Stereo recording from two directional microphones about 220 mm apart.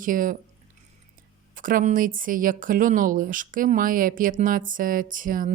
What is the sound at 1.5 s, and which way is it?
Speech, 40° right (ahead or behind).